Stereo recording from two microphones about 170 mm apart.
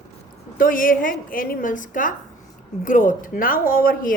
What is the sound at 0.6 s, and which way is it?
A woman's voice, 55° left (ahead or behind).